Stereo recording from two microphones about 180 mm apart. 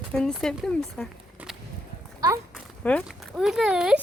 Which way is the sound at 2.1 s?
20° right (ahead or behind).